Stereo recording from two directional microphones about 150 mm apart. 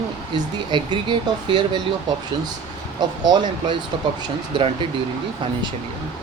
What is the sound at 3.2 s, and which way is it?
Speech, 30° right (ahead or behind).